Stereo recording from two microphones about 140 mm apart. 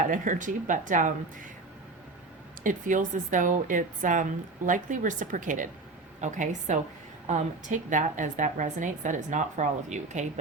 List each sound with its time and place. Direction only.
0.0 s a woman's voice: 70° right (ahead or behind)
2.6 s a woman's voice: 65° right (ahead or behind)